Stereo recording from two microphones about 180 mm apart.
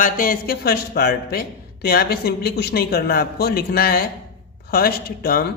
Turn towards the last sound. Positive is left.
turn(degrees=55)  # may be behind; listen again after turning